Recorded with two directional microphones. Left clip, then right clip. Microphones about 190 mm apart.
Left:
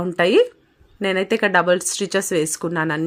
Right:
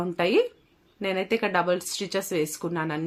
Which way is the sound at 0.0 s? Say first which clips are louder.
Left 7 dB; 45° left (ahead or behind).